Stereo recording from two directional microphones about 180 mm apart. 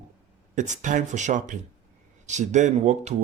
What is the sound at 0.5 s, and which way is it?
Speech, 45° right (ahead or behind).